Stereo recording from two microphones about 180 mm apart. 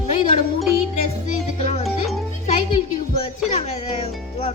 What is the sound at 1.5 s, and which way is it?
Speech, 35° left (ahead or behind).